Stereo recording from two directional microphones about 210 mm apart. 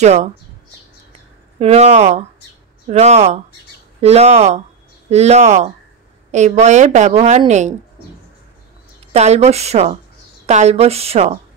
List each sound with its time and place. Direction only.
0.0 s a woman's voice: 35° right (ahead or behind)
1.6 s a woman's voice: 30° right (ahead or behind)
9.1 s a woman's voice: 30° right (ahead or behind)